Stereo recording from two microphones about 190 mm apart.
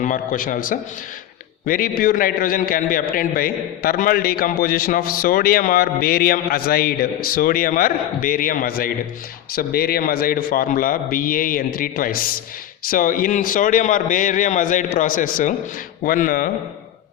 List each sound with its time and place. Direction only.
0.0 s a man's voice: 45° left (ahead or behind)